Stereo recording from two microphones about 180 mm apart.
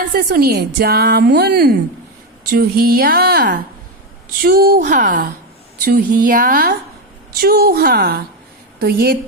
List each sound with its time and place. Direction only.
0.1 s speech: 55° right (ahead or behind)